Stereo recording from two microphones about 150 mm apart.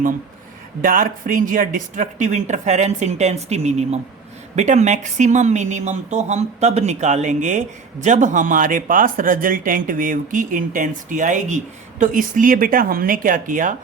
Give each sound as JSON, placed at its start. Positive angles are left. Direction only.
{"t": 0.8, "sound": "a woman's voice", "side_deg": -65}